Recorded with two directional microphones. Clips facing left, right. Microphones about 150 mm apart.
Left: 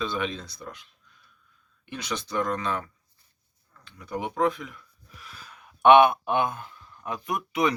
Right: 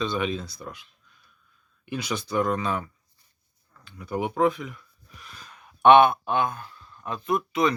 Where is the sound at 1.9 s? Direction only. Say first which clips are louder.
Right 3 dB; 10° right (ahead or behind).